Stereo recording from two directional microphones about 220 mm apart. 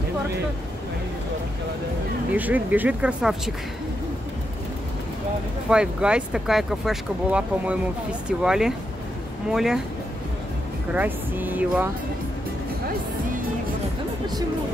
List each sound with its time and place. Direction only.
2.3 s speech: 5° right (ahead or behind)
5.7 s speech: 5° right (ahead or behind)
10.9 s speech: 10° right (ahead or behind)